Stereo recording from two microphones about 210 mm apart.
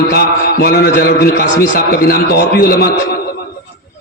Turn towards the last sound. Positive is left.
turn(degrees=45)  # may be behind; listen again after turning